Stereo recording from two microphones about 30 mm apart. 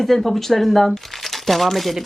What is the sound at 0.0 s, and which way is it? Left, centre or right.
Speech, centre.